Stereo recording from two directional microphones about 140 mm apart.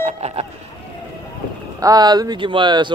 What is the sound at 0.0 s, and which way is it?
Speech, 45° right (ahead or behind).